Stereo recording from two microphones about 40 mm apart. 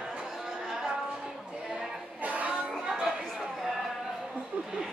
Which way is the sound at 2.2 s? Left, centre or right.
Right.